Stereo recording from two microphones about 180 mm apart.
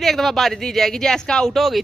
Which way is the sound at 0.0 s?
Centre (ahead or behind).